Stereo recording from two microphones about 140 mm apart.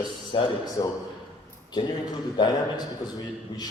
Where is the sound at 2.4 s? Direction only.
30° left (ahead or behind).